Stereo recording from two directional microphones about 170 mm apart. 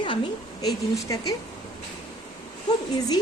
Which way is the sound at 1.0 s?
20° left (ahead or behind).